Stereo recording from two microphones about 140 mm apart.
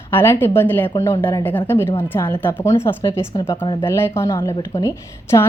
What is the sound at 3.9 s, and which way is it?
A woman's voice, 15° left (ahead or behind).